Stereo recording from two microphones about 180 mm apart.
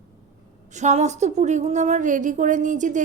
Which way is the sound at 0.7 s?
40° right (ahead or behind).